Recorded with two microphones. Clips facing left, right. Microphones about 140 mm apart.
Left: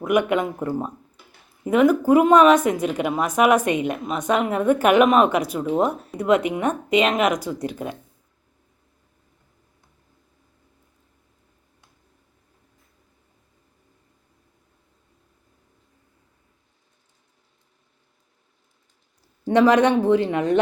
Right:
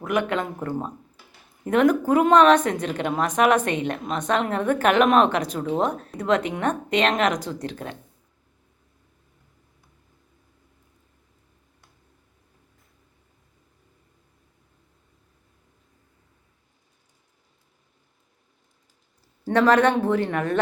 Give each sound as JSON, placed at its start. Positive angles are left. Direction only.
{"t": 0.0, "sound": "a woman's voice", "side_deg": 15}
{"t": 19.5, "sound": "a woman's voice", "side_deg": 15}